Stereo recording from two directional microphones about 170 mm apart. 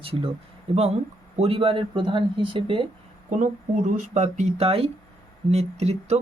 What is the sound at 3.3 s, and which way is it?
Speech, 45° right (ahead or behind).